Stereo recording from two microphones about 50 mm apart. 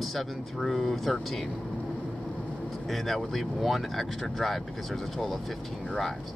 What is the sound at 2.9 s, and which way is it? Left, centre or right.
Speech, centre.